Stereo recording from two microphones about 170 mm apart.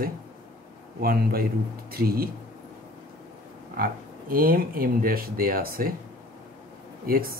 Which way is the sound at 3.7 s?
60° right (ahead or behind).